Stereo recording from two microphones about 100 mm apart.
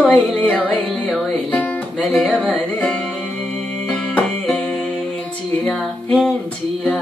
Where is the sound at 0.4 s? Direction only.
15° left (ahead or behind).